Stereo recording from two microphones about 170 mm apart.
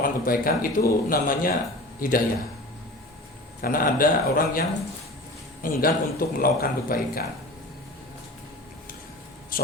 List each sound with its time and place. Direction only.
0.0 s speech: 55° left (ahead or behind)
3.6 s speech: 55° left (ahead or behind)
5.6 s speech: 60° left (ahead or behind)
9.5 s a sound: 55° left (ahead or behind)